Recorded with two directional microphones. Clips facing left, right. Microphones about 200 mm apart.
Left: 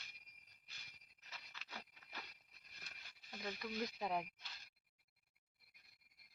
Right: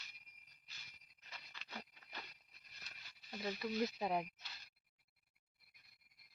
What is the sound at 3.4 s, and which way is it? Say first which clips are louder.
Speech: right 5 dB; 5° right (ahead or behind).